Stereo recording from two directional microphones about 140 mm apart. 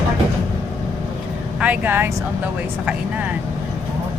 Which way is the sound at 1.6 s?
10° right (ahead or behind).